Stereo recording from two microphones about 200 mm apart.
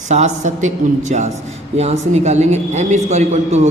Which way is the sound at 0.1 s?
35° right (ahead or behind).